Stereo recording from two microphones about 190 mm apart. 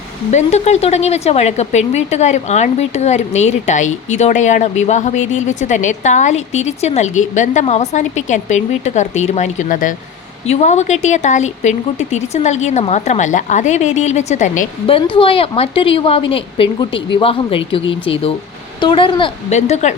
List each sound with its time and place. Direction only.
0.3 s speech: 35° left (ahead or behind)
14.8 s a woman's voice: 25° left (ahead or behind)